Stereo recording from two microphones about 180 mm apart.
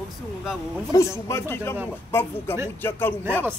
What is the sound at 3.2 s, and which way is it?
Speech, 10° right (ahead or behind).